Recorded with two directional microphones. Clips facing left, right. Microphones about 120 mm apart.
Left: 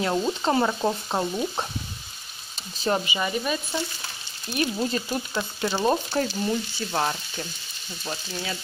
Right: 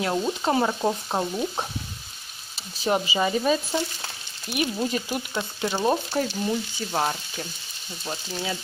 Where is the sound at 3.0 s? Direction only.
30° right (ahead or behind).